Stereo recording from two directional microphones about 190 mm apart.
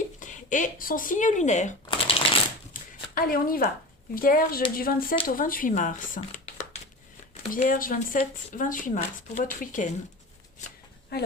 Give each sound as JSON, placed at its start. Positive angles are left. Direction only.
{"t": 0.2, "sound": "speech", "side_deg": 40}
{"t": 1.9, "sound": "shuffling cards", "side_deg": 30}
{"t": 2.8, "sound": "shuffling cards", "side_deg": 45}
{"t": 3.2, "sound": "speech", "side_deg": 50}
{"t": 7.5, "sound": "speech", "side_deg": 45}
{"t": 11.1, "sound": "speech", "side_deg": 55}